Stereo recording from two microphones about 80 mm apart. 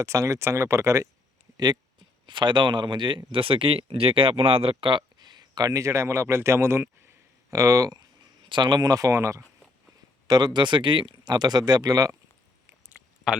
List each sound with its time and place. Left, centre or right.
0.0 s speech: right
1.5 s speech: right
2.2 s speech: right
7.5 s speech: right
8.4 s speech: right
10.2 s speech: right
13.3 s speech: centre